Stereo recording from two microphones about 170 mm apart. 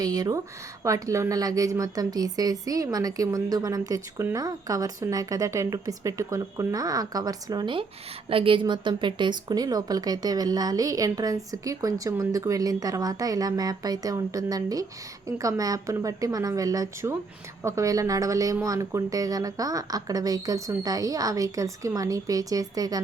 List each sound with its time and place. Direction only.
0.0 s speech: 20° right (ahead or behind)